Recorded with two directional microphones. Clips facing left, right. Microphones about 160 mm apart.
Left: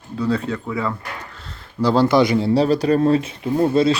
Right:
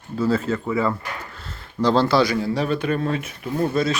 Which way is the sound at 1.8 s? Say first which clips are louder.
Left 2 dB; 10° left (ahead or behind).